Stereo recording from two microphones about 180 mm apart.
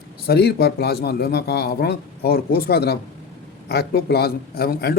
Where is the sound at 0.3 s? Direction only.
60° left (ahead or behind).